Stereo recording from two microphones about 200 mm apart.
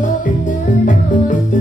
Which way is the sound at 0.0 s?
40° left (ahead or behind).